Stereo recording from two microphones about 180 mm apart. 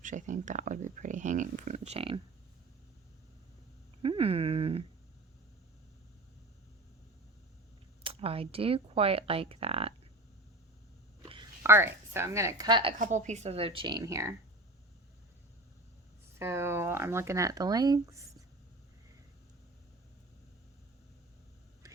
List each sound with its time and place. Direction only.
0.0 s speech: 45° right (ahead or behind)
4.0 s speech: 30° right (ahead or behind)
8.0 s speech: 30° right (ahead or behind)
11.6 s speech: 15° right (ahead or behind)
13.0 s speech: 40° right (ahead or behind); by 14.3 s 15° right (ahead or behind)
16.4 s speech: 15° right (ahead or behind)
21.8 s a sound: 20° right (ahead or behind)